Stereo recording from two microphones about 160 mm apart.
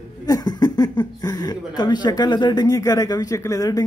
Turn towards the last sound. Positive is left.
turn(degrees=20)  # may be behind; listen again after turning